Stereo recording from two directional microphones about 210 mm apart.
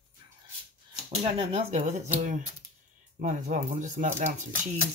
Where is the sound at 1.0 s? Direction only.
30° right (ahead or behind).